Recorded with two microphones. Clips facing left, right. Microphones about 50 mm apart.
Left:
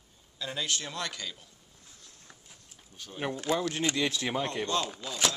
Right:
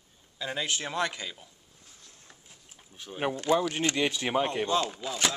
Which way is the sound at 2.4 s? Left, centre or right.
Centre.